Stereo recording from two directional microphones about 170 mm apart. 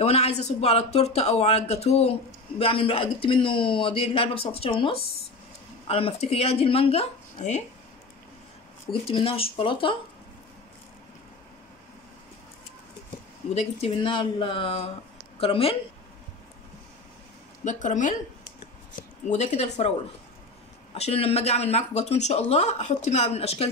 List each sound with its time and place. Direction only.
0.0 s a man's voice: 40° left (ahead or behind)
9.1 s a man's voice: 35° left (ahead or behind)
13.6 s a man's voice: 35° left (ahead or behind)
17.6 s a man's voice: 45° left (ahead or behind)
20.9 s a man's voice: 35° left (ahead or behind)